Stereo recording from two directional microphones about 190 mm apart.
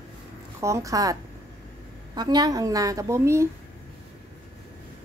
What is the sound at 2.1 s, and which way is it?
A woman's voice, 20° right (ahead or behind).